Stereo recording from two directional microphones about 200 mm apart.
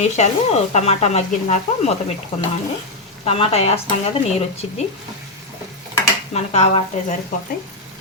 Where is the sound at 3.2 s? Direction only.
30° left (ahead or behind).